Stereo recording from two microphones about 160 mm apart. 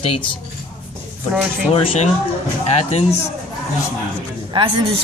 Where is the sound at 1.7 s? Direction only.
35° left (ahead or behind).